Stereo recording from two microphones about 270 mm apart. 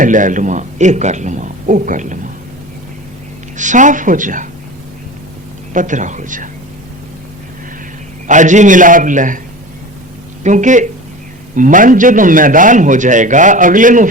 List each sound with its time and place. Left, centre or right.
0.0 s a man's voice: right
3.6 s a man's voice: right
5.7 s a man's voice: right
8.3 s a man's voice: right
10.4 s a man's voice: right